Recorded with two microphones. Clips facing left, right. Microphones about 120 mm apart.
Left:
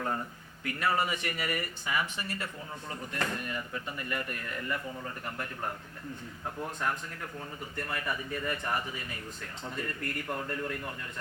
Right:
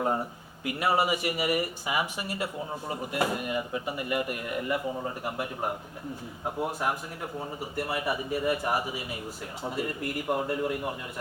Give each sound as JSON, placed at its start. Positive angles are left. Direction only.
{"t": 0.0, "sound": "speech", "side_deg": -20}